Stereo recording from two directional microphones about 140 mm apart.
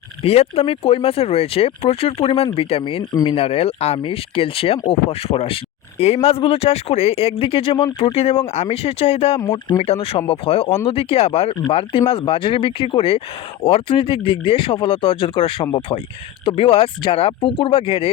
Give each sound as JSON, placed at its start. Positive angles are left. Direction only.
{"t": 0.3, "sound": "speech", "side_deg": 45}